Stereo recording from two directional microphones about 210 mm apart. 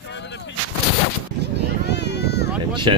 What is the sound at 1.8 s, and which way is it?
Run, 55° left (ahead or behind).